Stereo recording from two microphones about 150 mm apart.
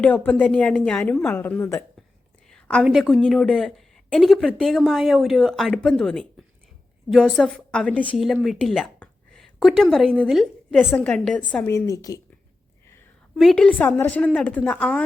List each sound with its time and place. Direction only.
0.0 s a woman's voice: 10° left (ahead or behind)
2.5 s a woman's voice: centre (ahead or behind)
11.5 s a woman's voice: 15° left (ahead or behind)
13.3 s a woman's voice: centre (ahead or behind)